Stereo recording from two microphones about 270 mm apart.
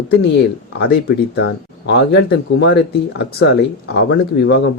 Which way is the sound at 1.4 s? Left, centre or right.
Left.